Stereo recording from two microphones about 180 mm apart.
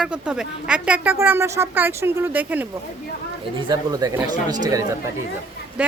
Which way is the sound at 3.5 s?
25° right (ahead or behind).